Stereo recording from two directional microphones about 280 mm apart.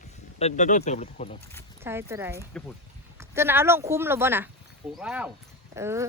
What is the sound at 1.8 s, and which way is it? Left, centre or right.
Speech, centre.